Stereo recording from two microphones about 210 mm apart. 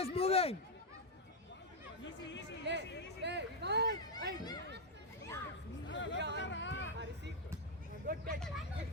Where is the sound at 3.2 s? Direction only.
55° right (ahead or behind).